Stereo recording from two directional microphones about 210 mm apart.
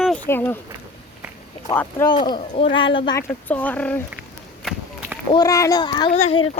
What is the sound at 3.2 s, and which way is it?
Speech, 10° left (ahead or behind).